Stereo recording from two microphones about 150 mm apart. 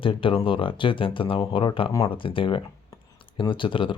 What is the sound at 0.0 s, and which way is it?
Speech, 35° left (ahead or behind).